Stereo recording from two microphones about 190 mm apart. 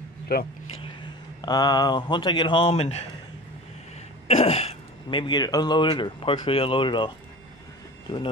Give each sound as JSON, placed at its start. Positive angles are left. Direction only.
{"t": 0.3, "sound": "speech", "side_deg": 55}
{"t": 0.8, "sound": "speech", "side_deg": 20}
{"t": 4.3, "sound": "speech", "side_deg": 35}